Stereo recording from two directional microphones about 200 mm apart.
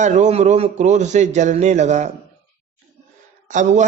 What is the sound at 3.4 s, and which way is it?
Speech, 40° right (ahead or behind).